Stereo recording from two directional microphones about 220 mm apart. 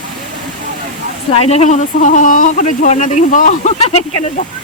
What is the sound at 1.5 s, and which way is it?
Speech, 30° left (ahead or behind).